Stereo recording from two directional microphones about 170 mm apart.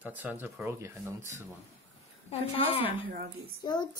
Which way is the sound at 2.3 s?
35° left (ahead or behind).